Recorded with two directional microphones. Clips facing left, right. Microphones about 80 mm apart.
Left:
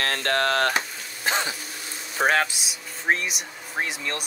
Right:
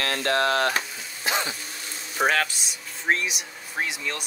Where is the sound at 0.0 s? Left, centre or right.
Left.